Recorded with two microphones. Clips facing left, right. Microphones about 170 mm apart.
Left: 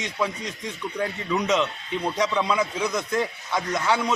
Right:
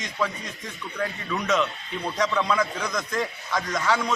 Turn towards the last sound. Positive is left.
turn(degrees=10)  # may be behind; listen again after turning